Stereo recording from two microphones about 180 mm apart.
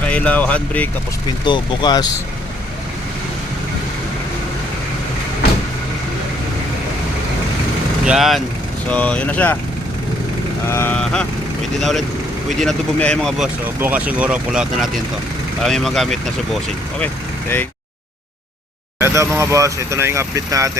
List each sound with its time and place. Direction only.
0.1 s speech: 10° left (ahead or behind)
1.5 s speech: 25° left (ahead or behind)
8.0 s speech: centre (ahead or behind)
10.7 s speech: 10° left (ahead or behind)
13.7 s speech: 10° right (ahead or behind)
18.9 s speech: 15° right (ahead or behind)